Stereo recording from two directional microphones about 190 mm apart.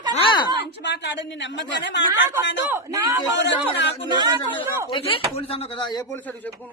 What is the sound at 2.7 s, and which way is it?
Speech, 15° right (ahead or behind).